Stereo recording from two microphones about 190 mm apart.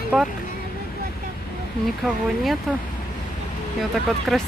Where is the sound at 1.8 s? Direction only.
Centre (ahead or behind).